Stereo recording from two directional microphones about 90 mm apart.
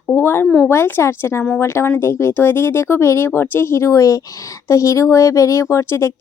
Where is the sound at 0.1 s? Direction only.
25° left (ahead or behind).